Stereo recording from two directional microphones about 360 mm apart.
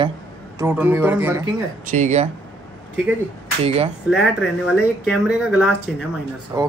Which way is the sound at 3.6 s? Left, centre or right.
Centre.